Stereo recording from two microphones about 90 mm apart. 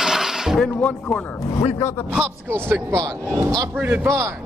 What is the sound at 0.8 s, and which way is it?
Speech, 20° left (ahead or behind).